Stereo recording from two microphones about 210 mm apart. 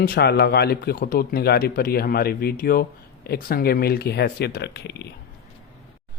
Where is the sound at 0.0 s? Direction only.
50° left (ahead or behind).